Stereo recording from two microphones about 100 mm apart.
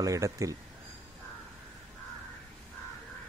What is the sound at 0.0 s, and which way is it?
Speech, 30° right (ahead or behind).